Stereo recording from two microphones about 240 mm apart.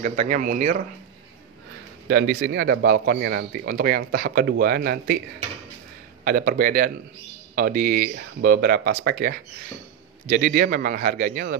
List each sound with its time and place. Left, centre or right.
0.0 s speech: right
2.0 s speech: right
6.2 s speech: right